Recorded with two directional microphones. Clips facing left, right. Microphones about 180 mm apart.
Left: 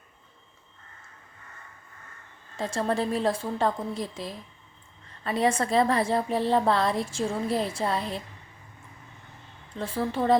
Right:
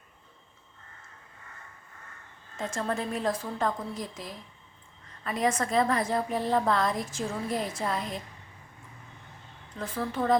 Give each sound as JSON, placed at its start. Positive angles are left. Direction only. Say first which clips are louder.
{"t": 2.6, "sound": "a woman's voice", "louder": "left 4 dB", "side_deg": 35}
{"t": 9.7, "sound": "a woman's voice", "louder": "left 3 dB", "side_deg": 30}